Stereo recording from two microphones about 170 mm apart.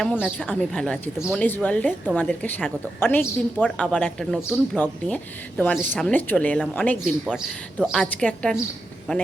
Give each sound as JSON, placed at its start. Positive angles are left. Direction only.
{"t": 0.3, "sound": "a woman's voice", "side_deg": 5}
{"t": 7.3, "sound": "speech", "side_deg": -5}
{"t": 7.8, "sound": "a woman's voice", "side_deg": 10}